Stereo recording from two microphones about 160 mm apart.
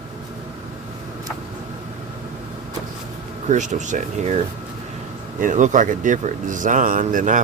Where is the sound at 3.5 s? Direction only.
50° right (ahead or behind).